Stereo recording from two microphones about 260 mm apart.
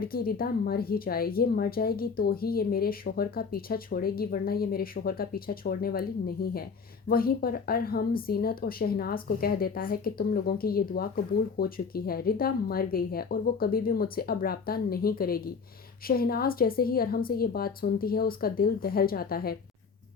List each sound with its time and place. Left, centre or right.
0.0 s a woman's voice: left